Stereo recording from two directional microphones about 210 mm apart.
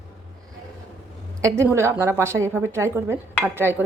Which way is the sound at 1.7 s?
10° right (ahead or behind).